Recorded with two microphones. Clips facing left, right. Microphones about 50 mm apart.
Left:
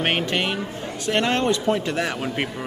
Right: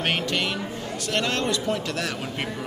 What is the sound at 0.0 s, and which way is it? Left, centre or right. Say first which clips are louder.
A man's voice: left 3 dB; left.